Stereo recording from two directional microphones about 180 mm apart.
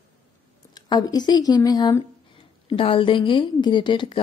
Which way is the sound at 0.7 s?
20° left (ahead or behind).